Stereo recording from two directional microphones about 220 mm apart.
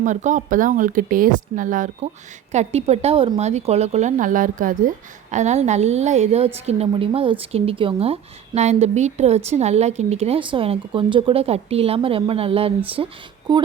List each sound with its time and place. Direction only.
0.0 s a woman's voice: 35° right (ahead or behind)